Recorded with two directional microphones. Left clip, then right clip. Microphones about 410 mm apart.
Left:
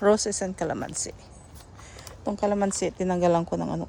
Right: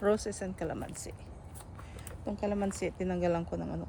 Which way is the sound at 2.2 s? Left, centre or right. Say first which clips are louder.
Left 9 dB; centre.